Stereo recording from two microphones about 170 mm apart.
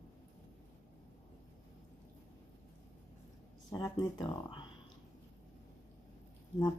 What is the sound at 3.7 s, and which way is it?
Speech, 20° left (ahead or behind).